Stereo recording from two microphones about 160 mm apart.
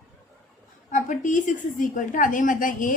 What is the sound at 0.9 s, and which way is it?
A woman's voice, 50° left (ahead or behind).